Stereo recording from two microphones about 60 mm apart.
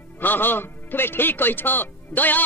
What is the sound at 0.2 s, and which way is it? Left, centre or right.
A man's voice, left.